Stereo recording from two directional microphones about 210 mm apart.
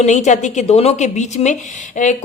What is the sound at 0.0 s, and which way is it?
A woman's voice, 35° left (ahead or behind).